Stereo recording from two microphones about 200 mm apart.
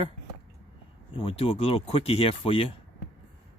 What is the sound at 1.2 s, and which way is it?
Speech, 30° left (ahead or behind).